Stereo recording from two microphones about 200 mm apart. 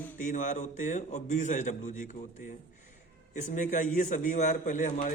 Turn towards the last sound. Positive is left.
turn(degrees=40)  # may be behind; listen again after turning